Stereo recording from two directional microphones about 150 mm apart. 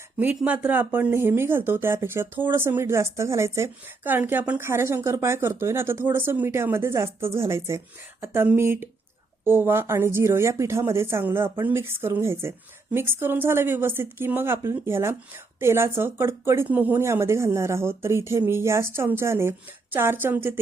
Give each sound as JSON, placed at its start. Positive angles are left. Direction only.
{"t": 0.2, "sound": "speech", "side_deg": -10}